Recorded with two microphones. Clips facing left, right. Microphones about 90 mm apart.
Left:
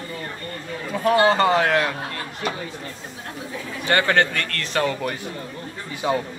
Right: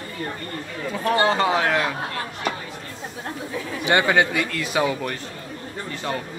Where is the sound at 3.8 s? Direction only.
15° right (ahead or behind).